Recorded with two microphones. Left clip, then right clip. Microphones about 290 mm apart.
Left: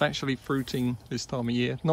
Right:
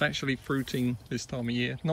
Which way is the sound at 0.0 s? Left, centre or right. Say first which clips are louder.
Left 2 dB; centre.